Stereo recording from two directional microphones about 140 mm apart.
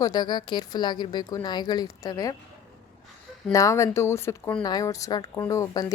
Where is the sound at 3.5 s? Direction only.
20° left (ahead or behind).